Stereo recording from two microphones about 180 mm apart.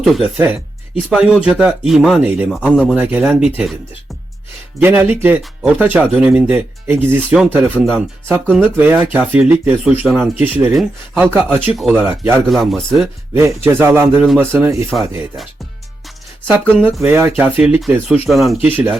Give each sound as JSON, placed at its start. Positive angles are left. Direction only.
{"t": 0.0, "sound": "speech", "side_deg": 0}
{"t": 4.8, "sound": "speech", "side_deg": -10}
{"t": 12.5, "sound": "speech", "side_deg": 0}
{"t": 13.3, "sound": "speech", "side_deg": -15}
{"t": 16.6, "sound": "speech", "side_deg": 5}
{"t": 17.0, "sound": "speech", "side_deg": -15}